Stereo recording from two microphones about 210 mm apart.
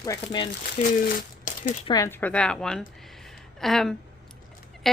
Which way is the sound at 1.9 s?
15° left (ahead or behind).